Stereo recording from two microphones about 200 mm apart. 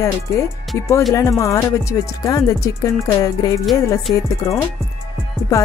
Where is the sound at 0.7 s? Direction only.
15° left (ahead or behind).